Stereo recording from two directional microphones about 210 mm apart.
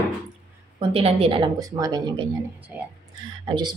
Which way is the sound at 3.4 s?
20° right (ahead or behind).